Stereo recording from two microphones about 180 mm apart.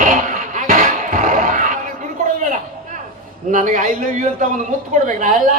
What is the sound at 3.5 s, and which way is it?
A man's voice, 45° right (ahead or behind).